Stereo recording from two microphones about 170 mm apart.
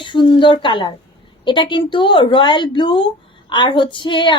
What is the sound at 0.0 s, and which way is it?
A woman's voice, 30° left (ahead or behind).